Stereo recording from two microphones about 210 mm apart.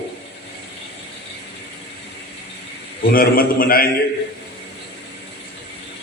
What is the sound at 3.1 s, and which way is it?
Speech, 45° left (ahead or behind).